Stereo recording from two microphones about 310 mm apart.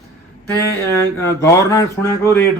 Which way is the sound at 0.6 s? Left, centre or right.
Centre.